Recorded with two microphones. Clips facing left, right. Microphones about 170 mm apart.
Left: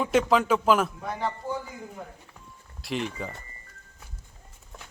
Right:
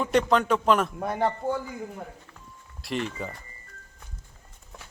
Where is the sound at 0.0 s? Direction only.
5° left (ahead or behind).